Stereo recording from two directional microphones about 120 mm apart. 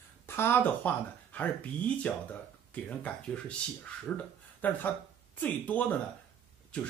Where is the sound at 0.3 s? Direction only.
20° left (ahead or behind).